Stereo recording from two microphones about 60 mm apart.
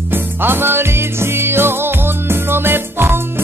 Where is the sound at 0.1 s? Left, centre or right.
Right.